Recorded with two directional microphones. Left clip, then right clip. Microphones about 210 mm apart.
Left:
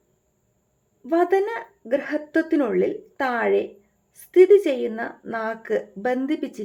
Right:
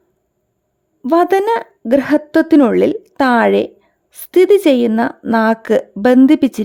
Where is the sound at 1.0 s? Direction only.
50° right (ahead or behind).